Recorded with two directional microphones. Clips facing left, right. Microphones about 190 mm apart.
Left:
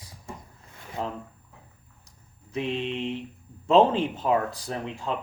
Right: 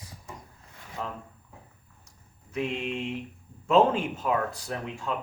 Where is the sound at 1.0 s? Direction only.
30° left (ahead or behind).